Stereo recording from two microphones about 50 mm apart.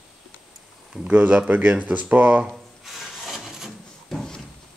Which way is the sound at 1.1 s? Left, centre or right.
Right.